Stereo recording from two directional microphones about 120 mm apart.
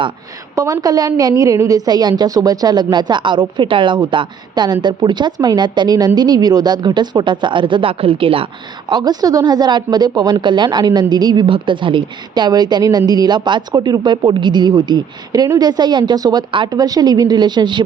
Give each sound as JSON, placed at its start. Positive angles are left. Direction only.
{"t": 0.5, "sound": "a woman's voice", "side_deg": -30}
{"t": 8.9, "sound": "a woman's voice", "side_deg": -35}